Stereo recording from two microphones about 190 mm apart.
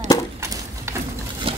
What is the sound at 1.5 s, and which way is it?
Water, 25° right (ahead or behind).